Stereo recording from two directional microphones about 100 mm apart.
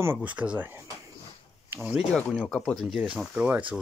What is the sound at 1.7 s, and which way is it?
Speech, 20° right (ahead or behind).